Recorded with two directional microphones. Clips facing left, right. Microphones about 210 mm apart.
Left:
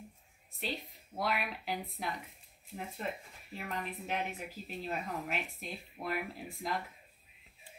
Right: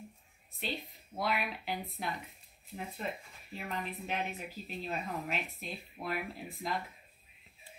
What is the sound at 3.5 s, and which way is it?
Speech, 5° left (ahead or behind).